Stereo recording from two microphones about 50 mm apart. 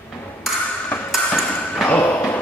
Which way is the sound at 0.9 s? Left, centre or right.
Left.